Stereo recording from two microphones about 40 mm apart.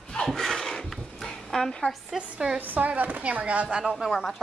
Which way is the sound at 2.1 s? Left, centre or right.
Centre.